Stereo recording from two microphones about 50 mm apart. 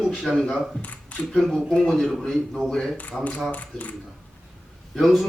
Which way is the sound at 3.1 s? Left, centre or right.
Centre.